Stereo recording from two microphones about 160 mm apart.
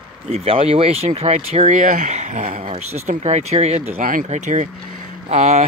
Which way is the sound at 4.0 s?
60° right (ahead or behind).